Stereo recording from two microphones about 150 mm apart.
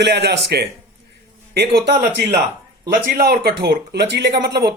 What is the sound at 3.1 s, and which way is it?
Speech, 80° right.